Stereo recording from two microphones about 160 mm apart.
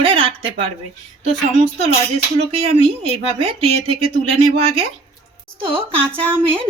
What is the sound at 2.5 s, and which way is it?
Speech, 40° right (ahead or behind).